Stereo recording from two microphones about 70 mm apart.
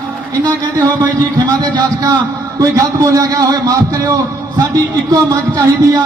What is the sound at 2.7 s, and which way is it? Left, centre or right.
A man's voice, right.